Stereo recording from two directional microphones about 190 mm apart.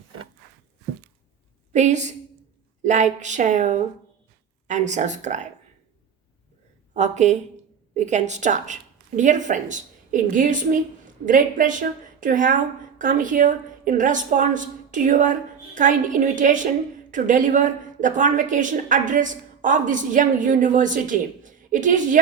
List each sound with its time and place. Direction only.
1.7 s speech: 40° right (ahead or behind)
6.9 s a woman's voice: 40° right (ahead or behind)